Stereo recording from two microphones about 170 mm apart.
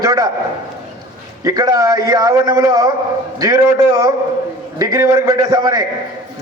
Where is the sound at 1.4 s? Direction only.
20° right (ahead or behind).